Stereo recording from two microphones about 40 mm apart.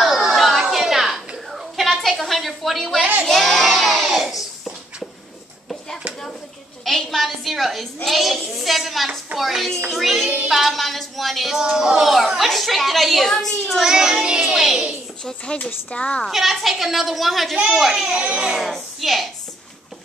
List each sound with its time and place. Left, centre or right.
0.0 s a sound: centre
3.3 s child singing: centre
6.8 s a sound: centre
8.0 s a child's voice: centre
11.5 s a child's voice: centre
13.8 s speech: centre
14.5 s speech: centre
15.2 s speech: left
16.3 s a child's voice: centre
18.1 s speech: right
18.6 s a child's voice: centre